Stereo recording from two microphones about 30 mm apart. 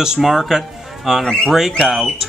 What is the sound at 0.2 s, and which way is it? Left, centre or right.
Speech, centre.